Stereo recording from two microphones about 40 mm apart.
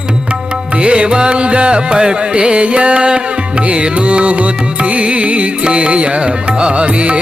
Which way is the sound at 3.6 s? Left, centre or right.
Right.